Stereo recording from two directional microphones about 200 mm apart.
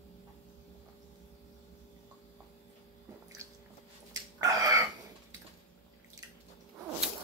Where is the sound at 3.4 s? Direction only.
15° right (ahead or behind).